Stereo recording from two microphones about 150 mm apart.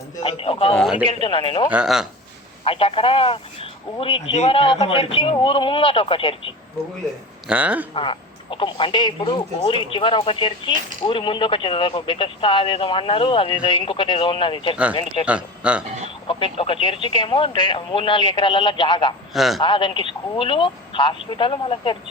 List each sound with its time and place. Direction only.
0.2 s speech: 40° left (ahead or behind)
1.7 s speech: 5° right (ahead or behind)
2.6 s speech: 35° left (ahead or behind)
7.4 s speech: 10° right (ahead or behind)
7.9 s speech: 35° left (ahead or behind)
15.3 s speech: 10° right (ahead or behind)
16.2 s speech: 35° left (ahead or behind)
19.3 s speech: centre (ahead or behind)
19.6 s speech: 35° left (ahead or behind)